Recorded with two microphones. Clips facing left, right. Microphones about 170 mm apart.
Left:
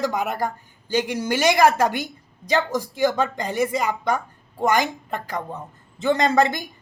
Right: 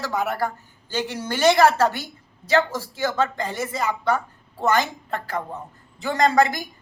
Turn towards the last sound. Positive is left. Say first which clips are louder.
# even
turn(degrees=20)  # may be behind; listen again after turning